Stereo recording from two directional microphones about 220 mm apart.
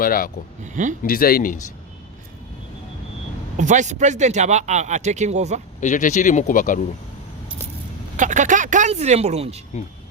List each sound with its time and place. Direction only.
0.0 s speech: 40° left (ahead or behind)
3.6 s speech: 35° right (ahead or behind)
5.8 s speech: 35° left (ahead or behind)
8.1 s speech: 35° right (ahead or behind)